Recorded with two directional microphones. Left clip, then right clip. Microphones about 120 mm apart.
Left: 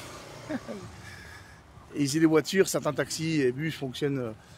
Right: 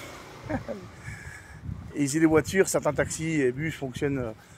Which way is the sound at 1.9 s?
10° left (ahead or behind).